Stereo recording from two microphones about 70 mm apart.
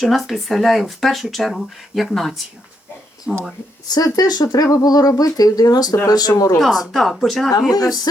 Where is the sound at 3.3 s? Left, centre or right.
Left.